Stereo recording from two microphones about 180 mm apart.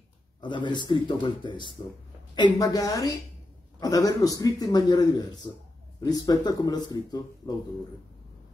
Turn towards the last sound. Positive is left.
turn(degrees=20)  # may be behind; listen again after turning